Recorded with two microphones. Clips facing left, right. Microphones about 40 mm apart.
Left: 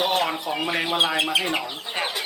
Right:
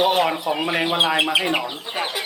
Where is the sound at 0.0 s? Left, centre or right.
Centre.